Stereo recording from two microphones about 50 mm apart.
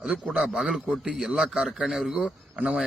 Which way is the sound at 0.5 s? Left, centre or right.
Centre.